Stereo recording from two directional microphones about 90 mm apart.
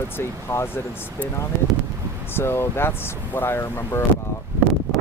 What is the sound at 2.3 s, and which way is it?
Speech, 25° left (ahead or behind).